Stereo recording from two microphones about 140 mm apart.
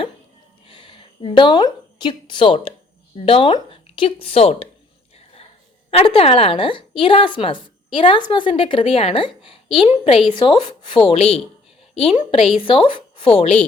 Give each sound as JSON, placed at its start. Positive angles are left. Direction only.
{"t": 0.6, "sound": "a woman's voice", "side_deg": 35}
{"t": 5.1, "sound": "a sound", "side_deg": 45}
{"t": 5.9, "sound": "a woman's voice", "side_deg": 45}